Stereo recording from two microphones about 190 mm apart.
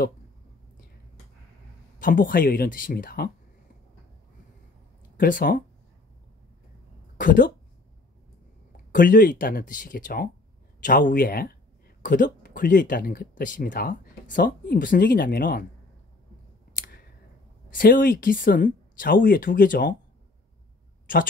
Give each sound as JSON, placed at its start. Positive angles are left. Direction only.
{"t": 2.0, "sound": "speech", "side_deg": 45}
{"t": 5.1, "sound": "speech", "side_deg": 45}
{"t": 7.2, "sound": "speech", "side_deg": 45}
{"t": 8.9, "sound": "speech", "side_deg": 45}
{"t": 16.7, "sound": "clicking", "side_deg": 50}
{"t": 17.6, "sound": "speech", "side_deg": 45}